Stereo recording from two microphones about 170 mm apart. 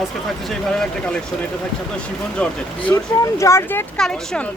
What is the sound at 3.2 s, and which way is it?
Speech, 15° left (ahead or behind).